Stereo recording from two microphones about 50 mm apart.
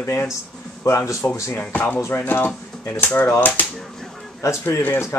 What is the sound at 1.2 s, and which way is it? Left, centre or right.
Speech, left.